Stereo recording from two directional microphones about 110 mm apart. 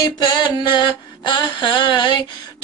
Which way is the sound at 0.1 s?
45° left (ahead or behind).